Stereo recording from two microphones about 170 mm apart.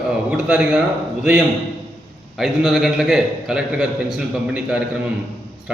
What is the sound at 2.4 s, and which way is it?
A man's voice, centre (ahead or behind).